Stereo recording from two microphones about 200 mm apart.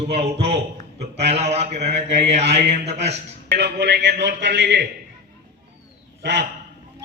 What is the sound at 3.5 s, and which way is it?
A man's voice, 55° right (ahead or behind).